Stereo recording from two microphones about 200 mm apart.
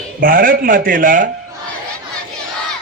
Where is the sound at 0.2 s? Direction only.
45° right (ahead or behind).